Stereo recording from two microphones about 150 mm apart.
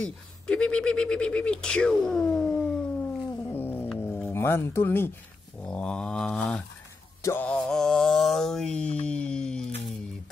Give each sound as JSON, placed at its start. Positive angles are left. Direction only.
{"t": 0.0, "sound": "speech", "side_deg": 5}
{"t": 3.4, "sound": "music", "side_deg": 15}
{"t": 4.3, "sound": "speech", "side_deg": 15}
{"t": 5.7, "sound": "mantra", "side_deg": 5}
{"t": 7.2, "sound": "music", "side_deg": 20}
{"t": 7.4, "sound": "mantra", "side_deg": 5}
{"t": 9.0, "sound": "a sound", "side_deg": 5}